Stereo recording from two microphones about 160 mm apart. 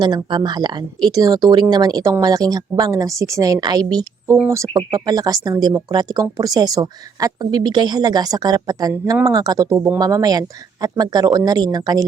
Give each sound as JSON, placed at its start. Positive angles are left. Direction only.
{"t": 0.0, "sound": "speech", "side_deg": -30}